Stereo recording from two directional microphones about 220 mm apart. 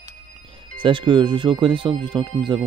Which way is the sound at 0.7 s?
20° right (ahead or behind).